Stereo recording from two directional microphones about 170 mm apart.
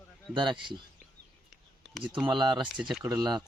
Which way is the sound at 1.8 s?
5° right (ahead or behind).